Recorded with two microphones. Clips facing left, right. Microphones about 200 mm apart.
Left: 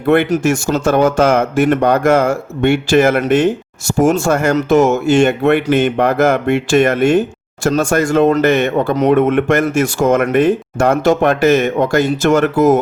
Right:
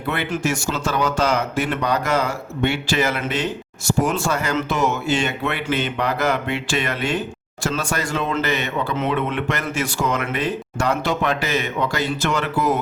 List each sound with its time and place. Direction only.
0.1 s speech: 50° left (ahead or behind)